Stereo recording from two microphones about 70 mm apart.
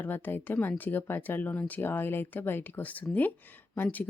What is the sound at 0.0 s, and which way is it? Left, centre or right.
Speech, left.